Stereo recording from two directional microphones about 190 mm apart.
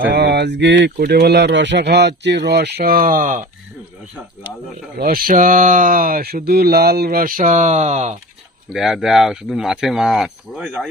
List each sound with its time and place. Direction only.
0.1 s speech: 60° right (ahead or behind); by 3.4 s 45° right (ahead or behind)
4.9 s speech: 50° right (ahead or behind)
8.7 s speech: centre (ahead or behind)